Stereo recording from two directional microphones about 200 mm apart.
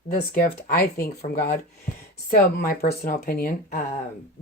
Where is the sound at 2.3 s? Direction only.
45° left (ahead or behind).